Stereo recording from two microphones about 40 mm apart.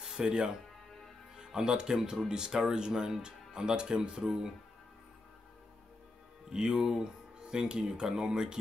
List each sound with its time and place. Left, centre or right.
0.0 s music: centre
1.3 s speech: centre
6.5 s speech: centre